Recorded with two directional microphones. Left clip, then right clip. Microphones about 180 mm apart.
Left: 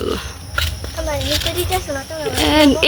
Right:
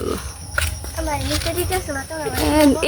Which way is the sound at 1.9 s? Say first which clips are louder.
Left 3 dB; 30° left (ahead or behind).